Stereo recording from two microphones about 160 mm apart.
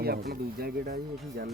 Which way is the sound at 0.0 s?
75° right (ahead or behind).